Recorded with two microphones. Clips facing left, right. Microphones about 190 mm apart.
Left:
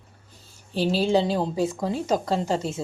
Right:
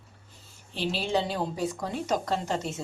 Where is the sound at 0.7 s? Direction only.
40° left (ahead or behind).